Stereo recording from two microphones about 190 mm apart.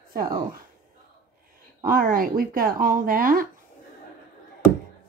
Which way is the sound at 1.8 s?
50° right (ahead or behind).